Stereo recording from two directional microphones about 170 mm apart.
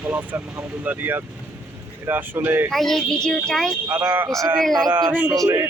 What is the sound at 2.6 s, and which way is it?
A woman's voice, centre (ahead or behind).